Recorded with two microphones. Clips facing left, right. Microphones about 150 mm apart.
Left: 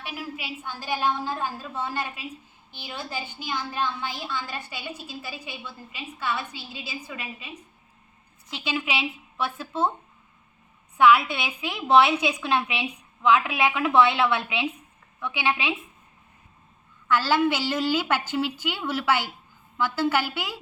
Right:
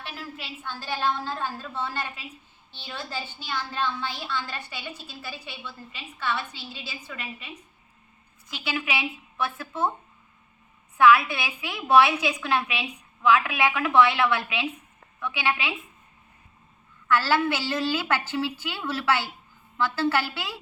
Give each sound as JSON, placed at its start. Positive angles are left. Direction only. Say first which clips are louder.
{"t": 0.0, "sound": "a woman's voice", "louder": "left 3 dB", "side_deg": 10}
{"t": 10.9, "sound": "a woman's voice", "louder": "even", "side_deg": 20}
{"t": 17.1, "sound": "a woman's voice", "louder": "left 1 dB", "side_deg": 20}